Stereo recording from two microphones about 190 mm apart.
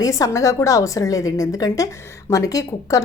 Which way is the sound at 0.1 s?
15° left (ahead or behind).